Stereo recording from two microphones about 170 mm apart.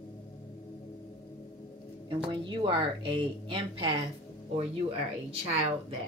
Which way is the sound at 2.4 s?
30° right (ahead or behind).